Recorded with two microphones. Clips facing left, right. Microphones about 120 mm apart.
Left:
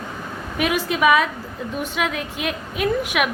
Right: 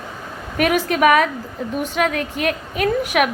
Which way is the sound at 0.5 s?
50° right (ahead or behind).